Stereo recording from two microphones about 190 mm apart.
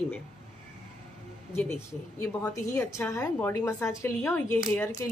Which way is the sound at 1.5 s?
10° left (ahead or behind).